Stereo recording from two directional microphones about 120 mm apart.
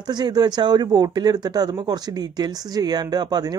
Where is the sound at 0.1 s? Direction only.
35° right (ahead or behind).